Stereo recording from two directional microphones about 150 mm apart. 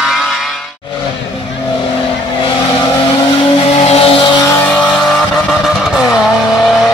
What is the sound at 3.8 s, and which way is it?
Vehicle, 40° left (ahead or behind).